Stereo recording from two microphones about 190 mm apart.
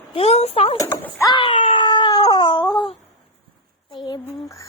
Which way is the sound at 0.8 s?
15° left (ahead or behind).